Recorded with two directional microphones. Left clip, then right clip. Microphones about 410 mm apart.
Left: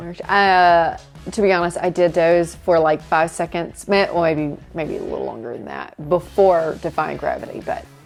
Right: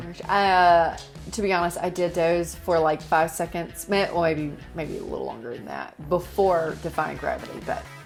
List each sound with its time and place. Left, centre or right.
0.1 s speech: left